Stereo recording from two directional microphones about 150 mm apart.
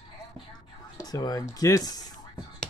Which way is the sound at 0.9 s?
25° left (ahead or behind).